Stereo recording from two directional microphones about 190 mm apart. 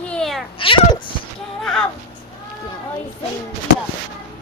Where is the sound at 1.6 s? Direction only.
Centre (ahead or behind).